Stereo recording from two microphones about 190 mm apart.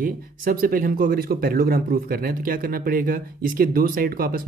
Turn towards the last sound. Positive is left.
turn(degrees=-50)  # may be behind; listen again after turning